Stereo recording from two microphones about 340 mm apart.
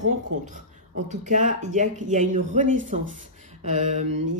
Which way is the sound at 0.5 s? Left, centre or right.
Right.